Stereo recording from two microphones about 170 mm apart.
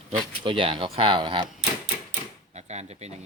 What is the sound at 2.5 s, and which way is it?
Drawer open or close, 40° right (ahead or behind).